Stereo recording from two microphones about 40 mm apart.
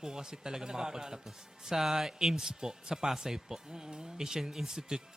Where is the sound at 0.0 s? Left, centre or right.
Centre.